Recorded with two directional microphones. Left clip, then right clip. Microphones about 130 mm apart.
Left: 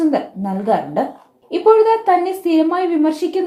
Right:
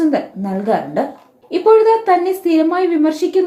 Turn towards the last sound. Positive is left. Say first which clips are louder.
# right 2 dB
turn(degrees=30)  # may be behind; listen again after turning